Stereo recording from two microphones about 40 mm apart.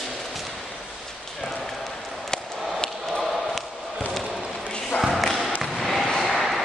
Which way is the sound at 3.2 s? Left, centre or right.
Centre.